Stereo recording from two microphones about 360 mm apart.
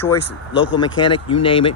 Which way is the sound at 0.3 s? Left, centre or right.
Left.